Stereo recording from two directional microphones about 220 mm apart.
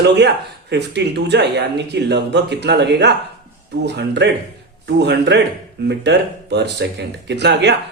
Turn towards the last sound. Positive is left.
turn(degrees=-50)  # may be behind; listen again after turning